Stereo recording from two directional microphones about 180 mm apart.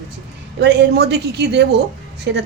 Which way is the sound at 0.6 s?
70° right (ahead or behind).